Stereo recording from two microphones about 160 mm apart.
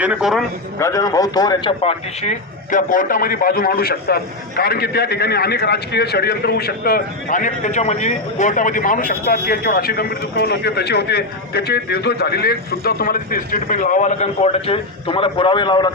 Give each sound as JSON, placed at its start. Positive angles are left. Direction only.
{"t": 0.0, "sound": "a man's voice", "side_deg": -5}
{"t": 0.8, "sound": "a man's voice", "side_deg": 20}
{"t": 1.8, "sound": "a man's voice", "side_deg": 40}